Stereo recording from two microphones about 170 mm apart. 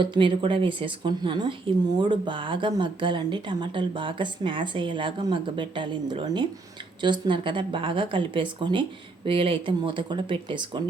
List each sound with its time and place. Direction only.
0.0 s a woman's voice: 30° right (ahead or behind)